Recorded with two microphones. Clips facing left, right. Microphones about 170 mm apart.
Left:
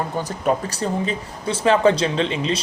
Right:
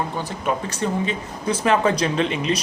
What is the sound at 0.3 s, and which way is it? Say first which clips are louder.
Speech: left 3 dB; 40° left (ahead or behind).